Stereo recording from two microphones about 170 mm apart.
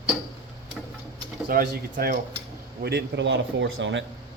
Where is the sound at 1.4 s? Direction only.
60° right (ahead or behind).